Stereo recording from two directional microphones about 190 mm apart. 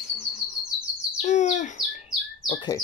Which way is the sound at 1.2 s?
40° left (ahead or behind).